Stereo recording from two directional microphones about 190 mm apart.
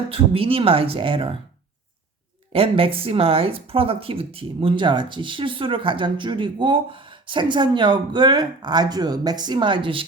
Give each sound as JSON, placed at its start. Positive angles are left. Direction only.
{"t": 0.1, "sound": "speech", "side_deg": -30}
{"t": 2.5, "sound": "speech", "side_deg": -30}